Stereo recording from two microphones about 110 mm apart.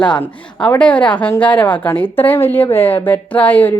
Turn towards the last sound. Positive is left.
turn(degrees=15)  # may be behind; listen again after turning